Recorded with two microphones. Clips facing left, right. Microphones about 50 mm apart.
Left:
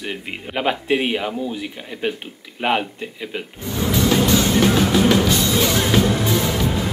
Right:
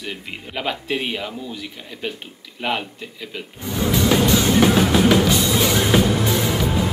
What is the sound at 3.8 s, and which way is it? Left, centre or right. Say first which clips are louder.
Music: even; centre.